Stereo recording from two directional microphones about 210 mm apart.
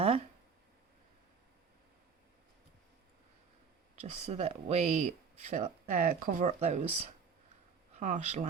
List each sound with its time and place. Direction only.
4.0 s speech: 30° right (ahead or behind)